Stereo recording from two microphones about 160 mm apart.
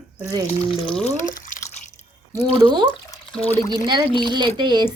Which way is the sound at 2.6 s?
30° right (ahead or behind).